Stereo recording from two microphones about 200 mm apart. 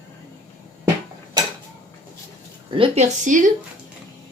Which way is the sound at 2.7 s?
30° right (ahead or behind).